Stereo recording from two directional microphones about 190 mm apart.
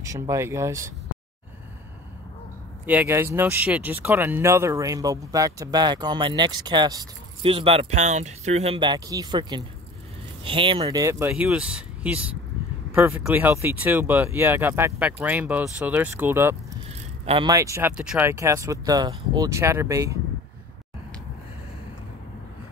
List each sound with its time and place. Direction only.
0.0 s speech: 15° right (ahead or behind)
2.9 s speech: 10° right (ahead or behind)
17.2 s speech: 30° right (ahead or behind)
17.5 s speech: 15° right (ahead or behind)